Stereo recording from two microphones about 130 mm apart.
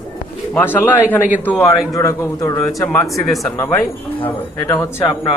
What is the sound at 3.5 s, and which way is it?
Speech, 20° left (ahead or behind).